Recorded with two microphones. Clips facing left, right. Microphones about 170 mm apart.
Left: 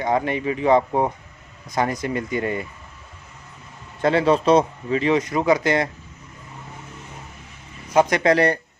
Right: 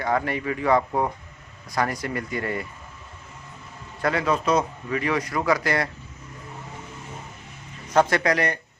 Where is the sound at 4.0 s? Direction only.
25° left (ahead or behind).